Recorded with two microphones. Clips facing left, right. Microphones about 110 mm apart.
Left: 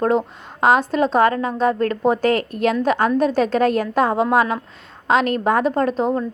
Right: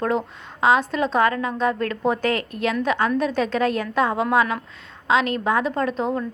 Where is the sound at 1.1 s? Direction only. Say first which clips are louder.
Left 2 dB; 35° left (ahead or behind).